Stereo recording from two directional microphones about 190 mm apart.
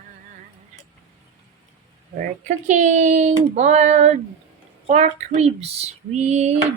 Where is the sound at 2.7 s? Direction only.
40° right (ahead or behind).